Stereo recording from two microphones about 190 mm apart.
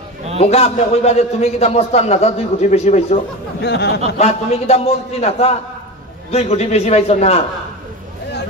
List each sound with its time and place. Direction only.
0.4 s a man's voice: 35° left (ahead or behind)
3.6 s speech: 60° left (ahead or behind)
4.2 s a man's voice: 35° left (ahead or behind)